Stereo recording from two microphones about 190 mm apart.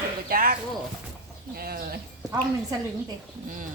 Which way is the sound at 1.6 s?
55° right (ahead or behind).